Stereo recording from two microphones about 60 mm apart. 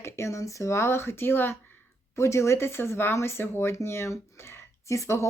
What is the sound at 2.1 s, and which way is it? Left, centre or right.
Speech, left.